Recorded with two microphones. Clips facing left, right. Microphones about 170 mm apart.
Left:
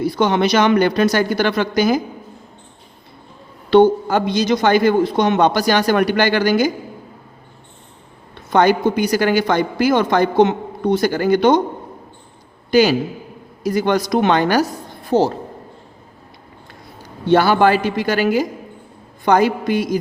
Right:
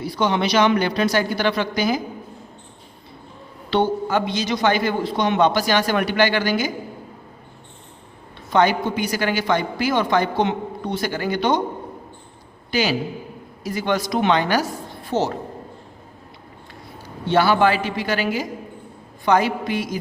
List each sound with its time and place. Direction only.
0.0 s a man's voice: 50° left (ahead or behind)
3.7 s a man's voice: 45° left (ahead or behind)
8.5 s a man's voice: 40° left (ahead or behind)
12.7 s a woman's voice: 40° left (ahead or behind)
15.1 s a woman's voice: 30° left (ahead or behind)
17.2 s a man's voice: 45° left (ahead or behind)